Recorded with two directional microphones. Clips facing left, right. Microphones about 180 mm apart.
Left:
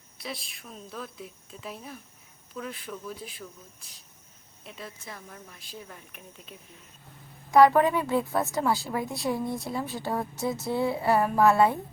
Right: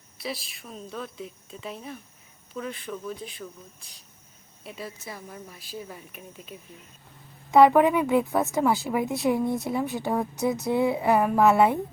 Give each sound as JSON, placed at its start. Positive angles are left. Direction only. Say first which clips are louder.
{"t": 0.2, "sound": "a woman's voice", "louder": "right 4 dB", "side_deg": -5}
{"t": 4.6, "sound": "speech", "louder": "right 4 dB", "side_deg": -5}
{"t": 7.7, "sound": "speech", "louder": "right 3 dB", "side_deg": -15}